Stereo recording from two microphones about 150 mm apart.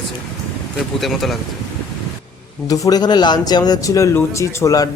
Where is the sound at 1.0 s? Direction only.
Centre (ahead or behind).